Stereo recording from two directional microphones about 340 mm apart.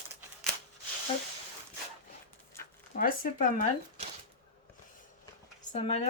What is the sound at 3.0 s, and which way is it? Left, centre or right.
Speech, left.